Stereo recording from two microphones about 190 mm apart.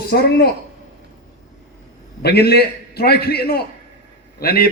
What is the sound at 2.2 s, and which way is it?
A man's voice, 60° left (ahead or behind).